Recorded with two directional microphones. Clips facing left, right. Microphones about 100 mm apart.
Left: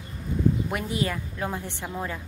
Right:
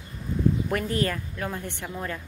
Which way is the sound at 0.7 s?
15° left (ahead or behind).